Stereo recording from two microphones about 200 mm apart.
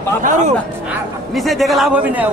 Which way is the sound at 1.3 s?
Centre (ahead or behind).